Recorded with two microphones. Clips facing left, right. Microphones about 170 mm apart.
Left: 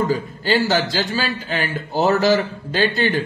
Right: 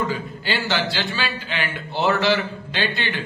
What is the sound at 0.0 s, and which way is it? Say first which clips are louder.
A man's voice: left 5 dB; 40° left (ahead or behind).